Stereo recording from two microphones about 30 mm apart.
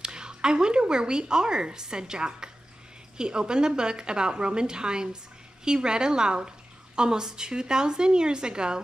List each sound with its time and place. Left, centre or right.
0.0 s a woman's voice: right